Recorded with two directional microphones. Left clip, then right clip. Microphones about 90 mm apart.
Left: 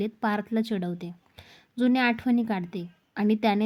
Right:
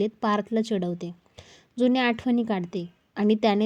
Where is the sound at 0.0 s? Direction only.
35° right (ahead or behind).